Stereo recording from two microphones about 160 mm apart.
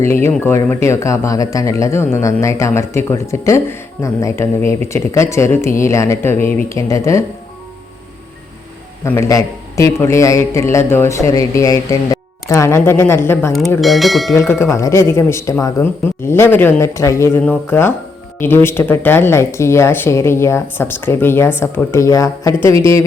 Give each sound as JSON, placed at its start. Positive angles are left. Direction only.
{"t": 0.1, "sound": "speech", "side_deg": 15}
{"t": 9.0, "sound": "speech", "side_deg": 15}
{"t": 13.8, "sound": "speech", "side_deg": 0}
{"t": 14.3, "sound": "speech", "side_deg": 15}